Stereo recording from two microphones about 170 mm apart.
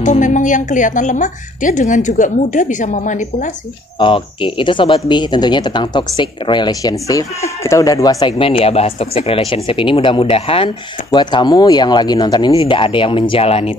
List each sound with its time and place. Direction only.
0.0 s a woman's voice: 45° left (ahead or behind)
4.0 s speech: 30° left (ahead or behind)